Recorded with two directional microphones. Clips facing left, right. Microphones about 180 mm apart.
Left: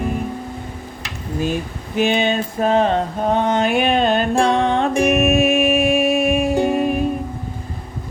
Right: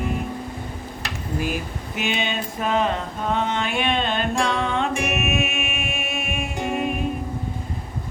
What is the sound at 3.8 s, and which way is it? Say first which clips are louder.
Music: left 6 dB; 40° left (ahead or behind).